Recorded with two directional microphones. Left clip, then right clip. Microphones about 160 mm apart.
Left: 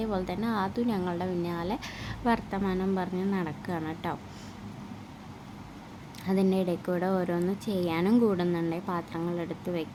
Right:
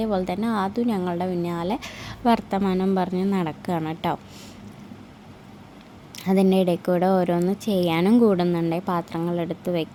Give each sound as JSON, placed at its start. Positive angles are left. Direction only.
{"t": 0.0, "sound": "a woman's voice", "side_deg": -30}
{"t": 6.1, "sound": "a woman's voice", "side_deg": -45}